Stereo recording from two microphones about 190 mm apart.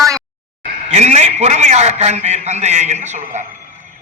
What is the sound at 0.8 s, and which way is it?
A man's voice, 35° right (ahead or behind).